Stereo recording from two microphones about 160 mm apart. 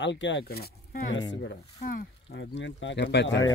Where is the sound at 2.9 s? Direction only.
90° left.